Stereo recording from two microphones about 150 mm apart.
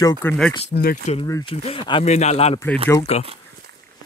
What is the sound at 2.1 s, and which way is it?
Speech, 45° left (ahead or behind).